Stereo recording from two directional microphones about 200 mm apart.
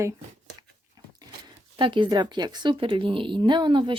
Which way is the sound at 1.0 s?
20° right (ahead or behind).